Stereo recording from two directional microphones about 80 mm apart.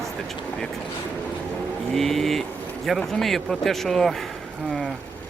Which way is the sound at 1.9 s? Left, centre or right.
Centre.